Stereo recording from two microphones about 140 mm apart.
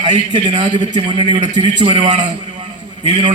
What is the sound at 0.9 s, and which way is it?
A man's voice, 35° right (ahead or behind).